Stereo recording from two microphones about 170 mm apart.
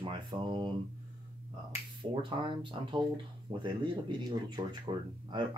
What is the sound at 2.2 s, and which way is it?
Speech, 30° right (ahead or behind).